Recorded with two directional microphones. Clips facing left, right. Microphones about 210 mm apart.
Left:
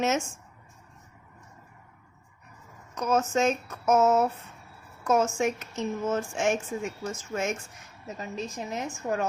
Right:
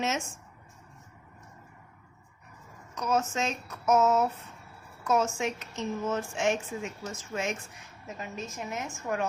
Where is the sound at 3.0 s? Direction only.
50° left (ahead or behind).